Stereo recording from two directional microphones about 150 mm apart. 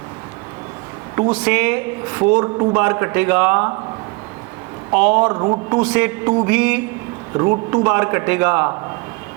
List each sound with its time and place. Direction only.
1.3 s a man's voice: 10° right (ahead or behind)
4.9 s a man's voice: 10° right (ahead or behind)
5.3 s a man's voice: 25° right (ahead or behind)
5.7 s a man's voice: 10° right (ahead or behind)